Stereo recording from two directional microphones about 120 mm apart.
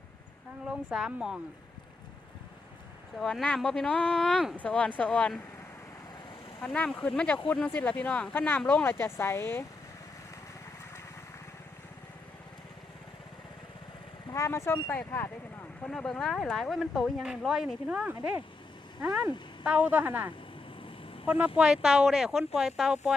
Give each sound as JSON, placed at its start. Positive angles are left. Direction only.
{"t": 0.6, "sound": "speech", "side_deg": -5}
{"t": 3.2, "sound": "speech", "side_deg": 5}
{"t": 6.6, "sound": "speech", "side_deg": 10}
{"t": 14.3, "sound": "speech", "side_deg": 25}
{"t": 15.8, "sound": "a woman's voice", "side_deg": 5}